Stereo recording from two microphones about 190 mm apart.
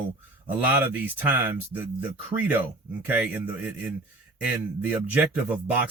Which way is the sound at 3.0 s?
10° right (ahead or behind).